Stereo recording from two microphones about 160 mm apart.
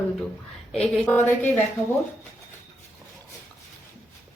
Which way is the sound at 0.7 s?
10° left (ahead or behind).